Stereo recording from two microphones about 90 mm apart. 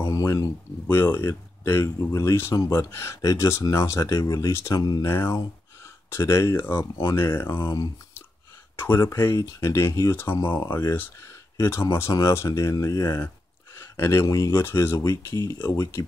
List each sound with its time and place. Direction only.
0.0 s a sound: 35° left (ahead or behind)
0.8 s speech: 25° left (ahead or behind)
4.7 s speech: 45° left (ahead or behind)
5.0 s speech: 30° left (ahead or behind)
8.7 s speech: 30° left (ahead or behind)
14.6 s speech: 30° left (ahead or behind)